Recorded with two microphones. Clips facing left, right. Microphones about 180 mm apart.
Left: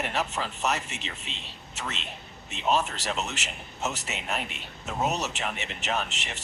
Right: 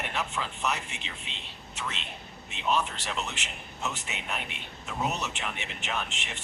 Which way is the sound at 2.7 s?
40° left (ahead or behind).